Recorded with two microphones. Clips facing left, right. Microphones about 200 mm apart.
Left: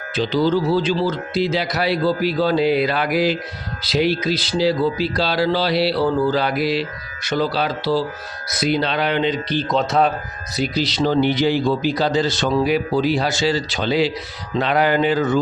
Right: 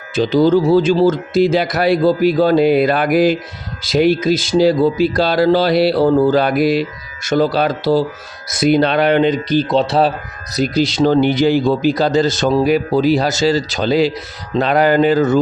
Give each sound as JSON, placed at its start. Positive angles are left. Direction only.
{"t": 0.2, "sound": "speech", "side_deg": -45}
{"t": 10.5, "sound": "speech", "side_deg": -45}